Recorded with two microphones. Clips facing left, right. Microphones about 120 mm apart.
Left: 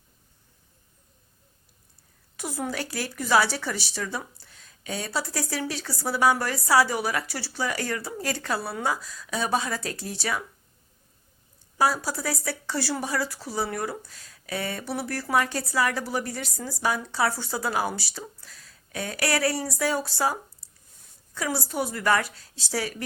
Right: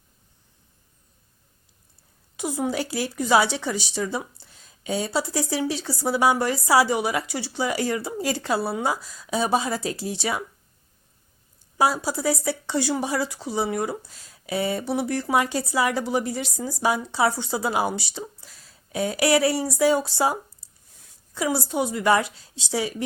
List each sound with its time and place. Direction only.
2.3 s speech: 20° right (ahead or behind)
11.8 s speech: 25° right (ahead or behind)
21.6 s speech: 20° right (ahead or behind)